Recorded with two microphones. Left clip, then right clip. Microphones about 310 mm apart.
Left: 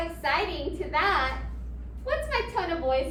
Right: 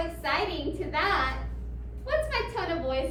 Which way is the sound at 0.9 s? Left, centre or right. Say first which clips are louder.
Left 2 dB; left.